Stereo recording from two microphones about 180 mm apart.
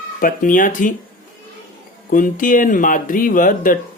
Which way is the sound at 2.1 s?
45° left (ahead or behind).